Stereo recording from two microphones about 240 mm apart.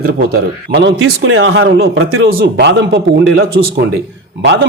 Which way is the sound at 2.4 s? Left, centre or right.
Right.